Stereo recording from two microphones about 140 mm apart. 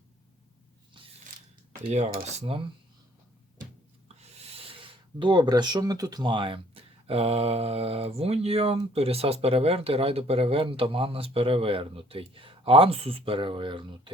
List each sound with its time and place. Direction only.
2.4 s speech: 40° right (ahead or behind)
4.2 s speech: 45° right (ahead or behind)